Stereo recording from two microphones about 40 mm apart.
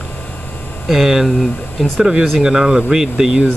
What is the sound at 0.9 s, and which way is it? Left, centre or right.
Speech, centre.